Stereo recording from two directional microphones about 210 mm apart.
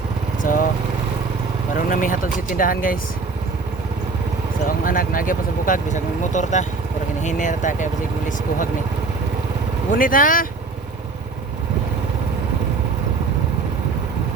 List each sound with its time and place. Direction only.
0.4 s vehicle: 40° left (ahead or behind)
1.9 s speech: 40° left (ahead or behind)
4.9 s speech: 40° left (ahead or behind)
9.9 s speech: 40° left (ahead or behind)